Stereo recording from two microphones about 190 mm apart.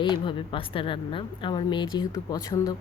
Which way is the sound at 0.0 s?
25° left (ahead or behind).